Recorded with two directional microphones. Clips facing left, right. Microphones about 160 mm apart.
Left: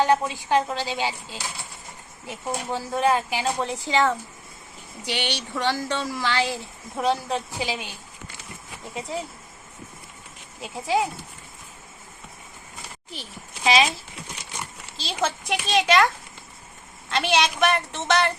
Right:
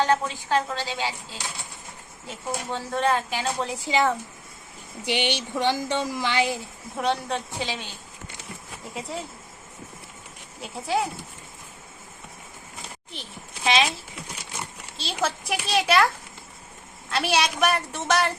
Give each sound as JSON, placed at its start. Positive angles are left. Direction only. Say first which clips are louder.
{"t": 0.0, "sound": "a woman's voice", "louder": "left 2 dB", "side_deg": 15}
{"t": 6.9, "sound": "a child's voice", "louder": "left 2 dB", "side_deg": 0}
{"t": 8.8, "sound": "a child's voice", "louder": "left 2 dB", "side_deg": 0}
{"t": 10.6, "sound": "a child's voice", "louder": "left 2 dB", "side_deg": 0}
{"t": 13.1, "sound": "a child's voice", "louder": "left 2 dB", "side_deg": 0}
{"t": 17.1, "sound": "a woman's voice", "louder": "left 1 dB", "side_deg": -5}